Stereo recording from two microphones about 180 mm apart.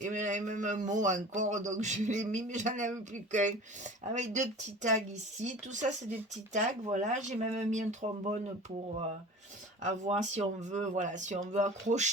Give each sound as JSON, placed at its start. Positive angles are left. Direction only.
{"t": 0.0, "sound": "a man's voice", "side_deg": -45}
{"t": 9.8, "sound": "speech", "side_deg": -40}